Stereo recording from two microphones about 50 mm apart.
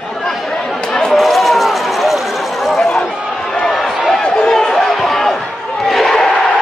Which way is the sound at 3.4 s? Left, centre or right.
Centre.